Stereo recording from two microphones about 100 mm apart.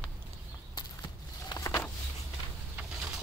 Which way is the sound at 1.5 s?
30° left (ahead or behind).